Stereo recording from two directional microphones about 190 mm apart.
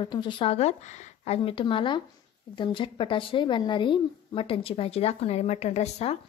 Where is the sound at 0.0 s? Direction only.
25° left (ahead or behind).